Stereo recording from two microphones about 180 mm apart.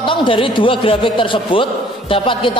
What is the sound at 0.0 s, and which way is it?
A man's voice, 25° left (ahead or behind).